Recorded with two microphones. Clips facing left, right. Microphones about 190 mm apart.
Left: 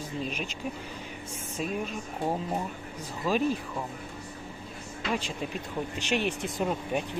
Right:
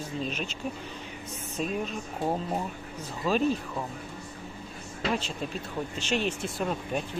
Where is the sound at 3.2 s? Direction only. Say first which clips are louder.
Right 1 dB; 10° left (ahead or behind).